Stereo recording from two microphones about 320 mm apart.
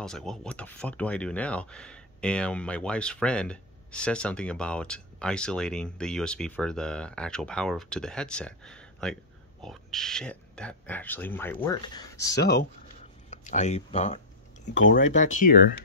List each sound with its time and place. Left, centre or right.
0.0 s speech: centre
13.3 s a sound: left
14.8 s speech: left
15.1 s speech: left